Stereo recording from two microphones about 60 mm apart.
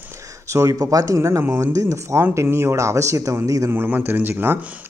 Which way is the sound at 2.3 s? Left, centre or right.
Right.